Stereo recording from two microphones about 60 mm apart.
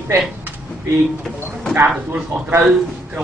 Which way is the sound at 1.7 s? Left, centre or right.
Right.